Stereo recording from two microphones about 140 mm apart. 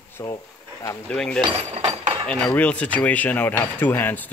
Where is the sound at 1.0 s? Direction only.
5° left (ahead or behind).